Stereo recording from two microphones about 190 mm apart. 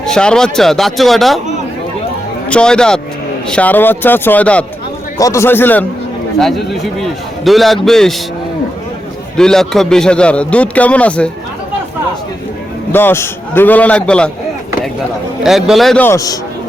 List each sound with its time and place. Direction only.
0.0 s a man's voice: 5° left (ahead or behind)
2.5 s a man's voice: 5° left (ahead or behind)
9.4 s a man's voice: 5° left (ahead or behind)
12.9 s a man's voice: 10° left (ahead or behind)
15.4 s a man's voice: centre (ahead or behind)
16.0 s a man's voice: 15° left (ahead or behind)